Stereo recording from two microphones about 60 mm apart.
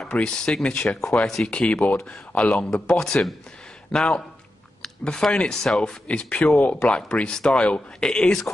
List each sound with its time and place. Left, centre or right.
0.2 s speech: centre
1.5 s speech: centre